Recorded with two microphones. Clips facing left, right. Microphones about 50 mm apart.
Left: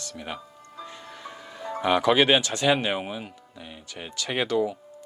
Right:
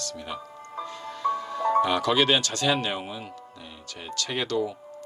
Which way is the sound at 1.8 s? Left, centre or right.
Left.